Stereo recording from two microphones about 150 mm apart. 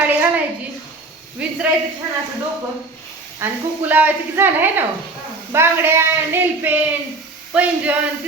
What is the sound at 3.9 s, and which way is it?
A woman's voice, 10° right (ahead or behind).